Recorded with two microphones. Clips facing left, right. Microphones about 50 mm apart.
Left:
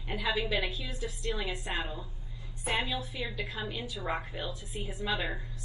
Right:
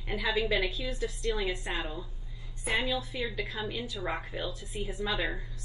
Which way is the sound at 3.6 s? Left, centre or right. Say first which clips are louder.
Right 2 dB; left.